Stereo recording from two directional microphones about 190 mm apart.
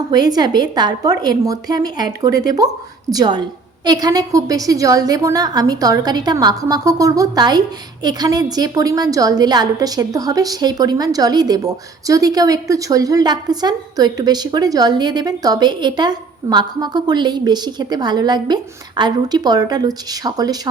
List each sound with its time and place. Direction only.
0.1 s a woman's voice: 20° right (ahead or behind)
2.3 s speech: 50° left (ahead or behind)
3.1 s a woman's voice: 20° right (ahead or behind)